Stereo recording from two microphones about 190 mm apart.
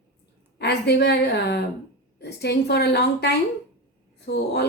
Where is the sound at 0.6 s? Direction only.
60° left (ahead or behind).